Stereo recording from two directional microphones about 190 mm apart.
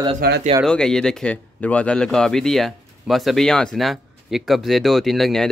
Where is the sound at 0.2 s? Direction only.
55° right (ahead or behind).